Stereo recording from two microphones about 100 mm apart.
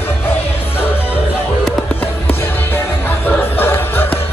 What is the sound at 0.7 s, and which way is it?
Music, 20° left (ahead or behind).